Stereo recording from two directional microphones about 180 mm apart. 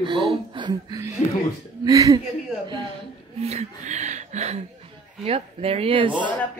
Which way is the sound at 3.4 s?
35° right (ahead or behind).